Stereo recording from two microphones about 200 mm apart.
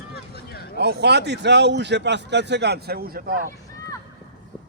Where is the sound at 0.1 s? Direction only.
50° left (ahead or behind).